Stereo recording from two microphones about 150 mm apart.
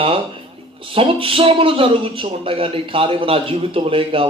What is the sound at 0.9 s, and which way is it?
A man's voice, 35° right (ahead or behind).